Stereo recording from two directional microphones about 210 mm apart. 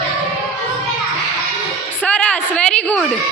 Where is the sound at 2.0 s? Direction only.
5° left (ahead or behind).